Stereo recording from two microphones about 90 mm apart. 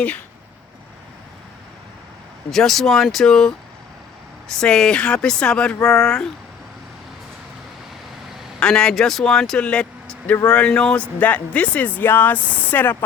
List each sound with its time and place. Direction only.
2.5 s speech: 5° left (ahead or behind)
8.5 s speech: 10° left (ahead or behind)